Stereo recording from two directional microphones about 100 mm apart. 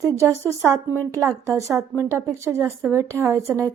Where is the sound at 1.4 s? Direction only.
30° right (ahead or behind).